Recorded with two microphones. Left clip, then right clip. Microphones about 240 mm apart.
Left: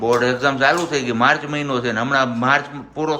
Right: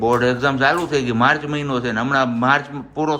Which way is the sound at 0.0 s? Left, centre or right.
Centre.